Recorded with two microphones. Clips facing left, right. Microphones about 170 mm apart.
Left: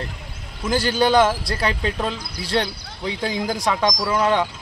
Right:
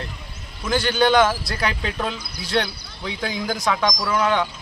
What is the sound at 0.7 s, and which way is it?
Speech, 35° left (ahead or behind).